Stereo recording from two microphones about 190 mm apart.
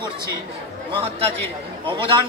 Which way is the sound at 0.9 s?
30° right (ahead or behind).